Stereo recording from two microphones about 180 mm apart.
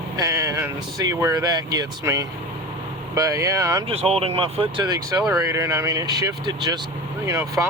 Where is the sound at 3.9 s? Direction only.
35° right (ahead or behind).